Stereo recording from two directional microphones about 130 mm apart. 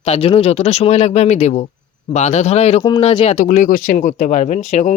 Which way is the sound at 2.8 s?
40° left (ahead or behind).